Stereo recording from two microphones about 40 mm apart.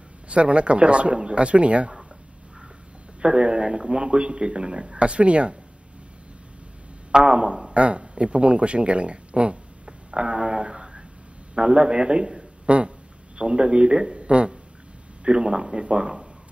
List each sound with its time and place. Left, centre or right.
0.3 s speech: right
3.2 s a man's voice: right
7.1 s a man's voice: centre
9.8 s a sound: right
11.5 s a man's voice: right
12.6 s a sound: right
13.4 s speech: right